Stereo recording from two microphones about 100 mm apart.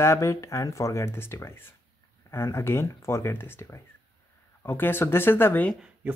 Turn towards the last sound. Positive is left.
turn(degrees=20)  # may be behind; listen again after turning